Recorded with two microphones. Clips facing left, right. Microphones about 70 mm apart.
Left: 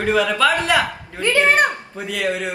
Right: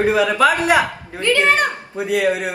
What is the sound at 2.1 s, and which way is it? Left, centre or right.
Speech, right.